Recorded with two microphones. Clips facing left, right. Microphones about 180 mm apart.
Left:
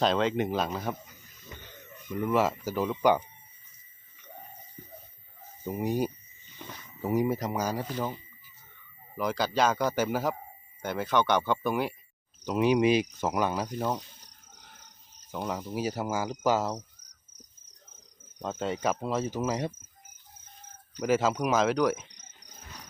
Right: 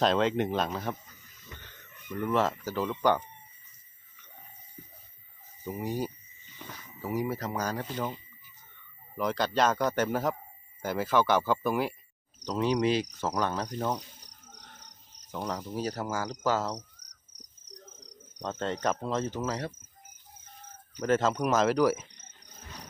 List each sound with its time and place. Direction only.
0.0 s a man's voice: centre (ahead or behind)
5.6 s speech: 20° left (ahead or behind)
9.1 s a man's voice: centre (ahead or behind)
12.5 s speech: 10° left (ahead or behind)
14.8 s cricket: 75° right (ahead or behind)
15.3 s speech: 5° left (ahead or behind)
17.7 s cricket: 75° right (ahead or behind)
18.3 s speech: 5° left (ahead or behind)
21.0 s a man's voice: 5° left (ahead or behind)